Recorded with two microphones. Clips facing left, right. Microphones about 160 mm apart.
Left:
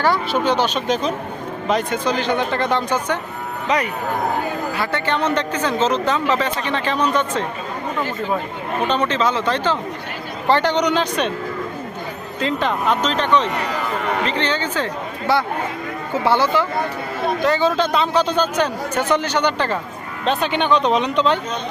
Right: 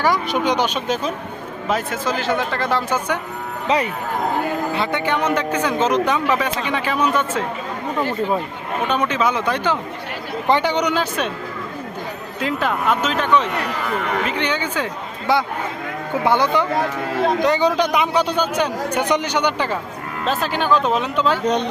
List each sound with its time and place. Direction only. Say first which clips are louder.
0.0 s a man's voice: left 1 dB; 15° right (ahead or behind)
4.7 s a man's voice: right 1 dB; 20° right (ahead or behind)
8.9 s a man's voice: even; 10° right (ahead or behind)
12.4 s a man's voice: left 1 dB; 5° right (ahead or behind)
16.2 s a man's voice: even; 15° right (ahead or behind)